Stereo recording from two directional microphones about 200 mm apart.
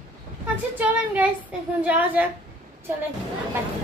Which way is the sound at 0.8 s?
10° right (ahead or behind).